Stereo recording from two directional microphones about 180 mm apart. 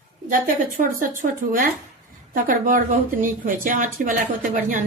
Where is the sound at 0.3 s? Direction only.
50° right (ahead or behind).